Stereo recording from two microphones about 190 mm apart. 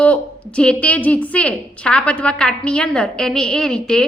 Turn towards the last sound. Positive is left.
turn(degrees=5)  # may be behind; listen again after turning